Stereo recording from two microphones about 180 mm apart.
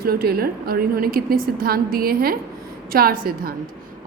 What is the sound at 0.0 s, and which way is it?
A woman's voice, 60° right (ahead or behind).